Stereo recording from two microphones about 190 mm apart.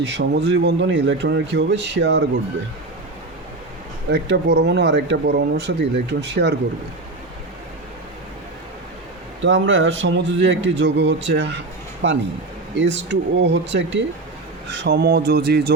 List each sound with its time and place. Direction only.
0.0 s speech: 70° right (ahead or behind)
4.1 s speech: 60° right (ahead or behind)
9.4 s speech: 75° right (ahead or behind); by 15.7 s 60° right (ahead or behind)